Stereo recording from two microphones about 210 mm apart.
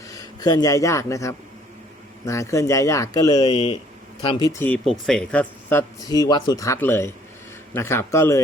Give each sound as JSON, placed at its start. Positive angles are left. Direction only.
{"t": 0.1, "sound": "speech", "side_deg": 15}